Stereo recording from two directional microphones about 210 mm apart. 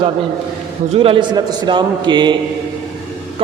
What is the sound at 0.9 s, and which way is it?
A man's voice, 25° right (ahead or behind).